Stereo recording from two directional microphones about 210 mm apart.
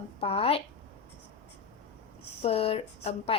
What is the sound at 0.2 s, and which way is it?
Speech, 25° left (ahead or behind).